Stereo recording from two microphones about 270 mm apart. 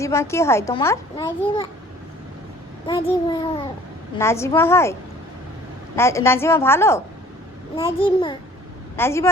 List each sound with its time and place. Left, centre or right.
0.0 s a child's voice: centre
2.8 s a child's voice: centre
6.0 s a child's voice: centre